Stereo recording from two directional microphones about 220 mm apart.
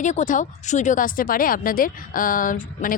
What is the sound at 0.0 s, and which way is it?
Speech, 35° left (ahead or behind).